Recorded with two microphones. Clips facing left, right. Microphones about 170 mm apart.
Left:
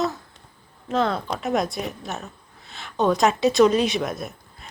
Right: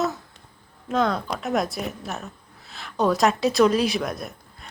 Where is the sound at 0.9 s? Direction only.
Centre (ahead or behind).